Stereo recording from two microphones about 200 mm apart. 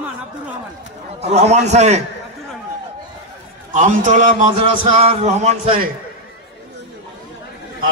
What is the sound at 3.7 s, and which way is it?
Music, 40° right (ahead or behind).